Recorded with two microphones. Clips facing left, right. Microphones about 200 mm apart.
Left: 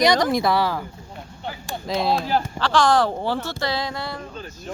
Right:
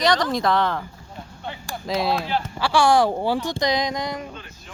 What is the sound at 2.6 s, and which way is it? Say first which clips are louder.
Speech: right 2 dB; 10° right (ahead or behind).